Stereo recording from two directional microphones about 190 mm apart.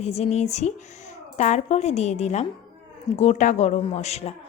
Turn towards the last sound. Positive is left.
turn(degrees=35)  # may be behind; listen again after turning